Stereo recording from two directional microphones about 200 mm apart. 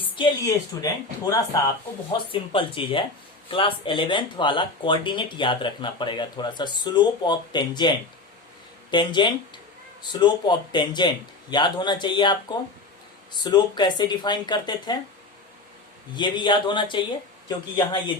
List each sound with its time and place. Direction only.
0.2 s speech: 20° left (ahead or behind)
2.3 s speech: 25° left (ahead or behind)
16.1 s speech: 25° left (ahead or behind)